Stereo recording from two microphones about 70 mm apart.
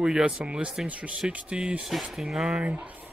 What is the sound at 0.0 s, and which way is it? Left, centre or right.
Speech, centre.